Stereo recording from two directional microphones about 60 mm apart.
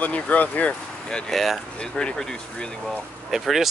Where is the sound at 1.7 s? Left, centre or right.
Centre.